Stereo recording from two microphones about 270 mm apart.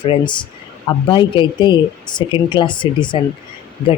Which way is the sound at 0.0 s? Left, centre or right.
Centre.